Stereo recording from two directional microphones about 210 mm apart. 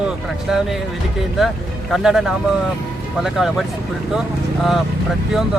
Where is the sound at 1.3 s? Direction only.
Centre (ahead or behind).